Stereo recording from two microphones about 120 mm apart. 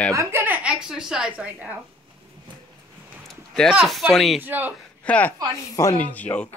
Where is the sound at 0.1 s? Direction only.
20° right (ahead or behind).